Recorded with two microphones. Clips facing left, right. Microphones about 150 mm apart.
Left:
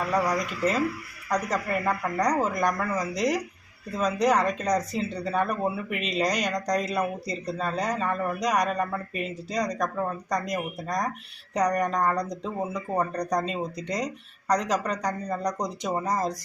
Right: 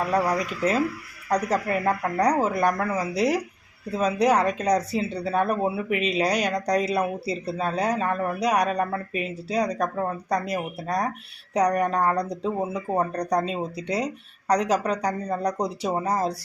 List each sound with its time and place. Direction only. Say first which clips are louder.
0.0 s speech: right 2 dB; 10° right (ahead or behind)
15.5 s speech: right 4 dB; 30° right (ahead or behind)
15.9 s speech: right 1 dB; 10° right (ahead or behind)